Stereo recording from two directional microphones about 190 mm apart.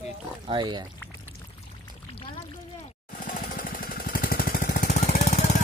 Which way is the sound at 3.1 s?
45° left (ahead or behind).